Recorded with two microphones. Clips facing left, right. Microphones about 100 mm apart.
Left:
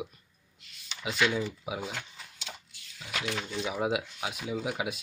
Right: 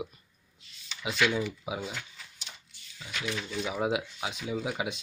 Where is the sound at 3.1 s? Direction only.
75° left (ahead or behind).